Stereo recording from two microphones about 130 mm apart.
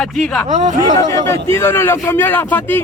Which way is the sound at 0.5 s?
65° right (ahead or behind).